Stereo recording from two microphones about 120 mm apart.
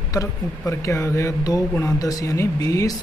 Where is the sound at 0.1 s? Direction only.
25° left (ahead or behind).